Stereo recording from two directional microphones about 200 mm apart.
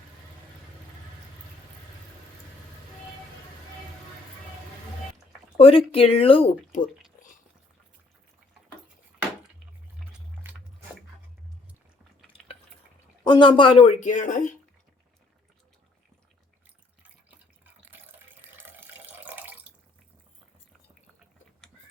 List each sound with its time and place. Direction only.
5.5 s speech: 30° left (ahead or behind)
13.2 s a woman's voice: 25° left (ahead or behind); by 14.6 s 40° left (ahead or behind)
17.0 s drip: 10° right (ahead or behind)
18.5 s water tap: 10° right (ahead or behind)